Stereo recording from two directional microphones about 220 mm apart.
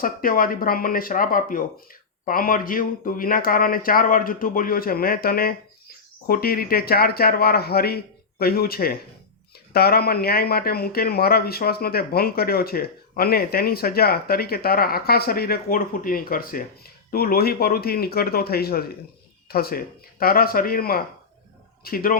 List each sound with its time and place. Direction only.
0.0 s speech: 40° left (ahead or behind)